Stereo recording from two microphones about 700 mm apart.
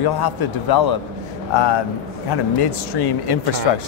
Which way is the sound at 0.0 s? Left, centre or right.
Left.